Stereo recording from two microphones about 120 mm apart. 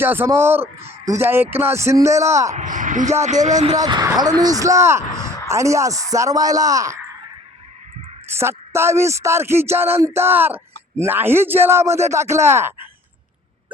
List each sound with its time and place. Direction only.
0.0 s speech: 20° right (ahead or behind)
2.5 s speech: 90° right
3.2 s speech: 75° right (ahead or behind)
3.8 s a woman's voice: 35° right (ahead or behind)
8.3 s speech: 20° right (ahead or behind)